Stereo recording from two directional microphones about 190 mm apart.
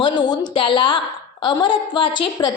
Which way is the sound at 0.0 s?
20° left (ahead or behind).